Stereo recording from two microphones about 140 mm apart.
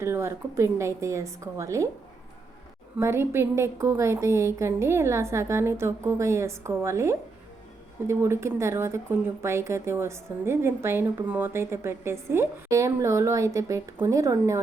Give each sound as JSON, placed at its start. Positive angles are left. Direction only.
{"t": 0.0, "sound": "a woman's voice", "side_deg": -20}
{"t": 3.0, "sound": "a woman's voice", "side_deg": -15}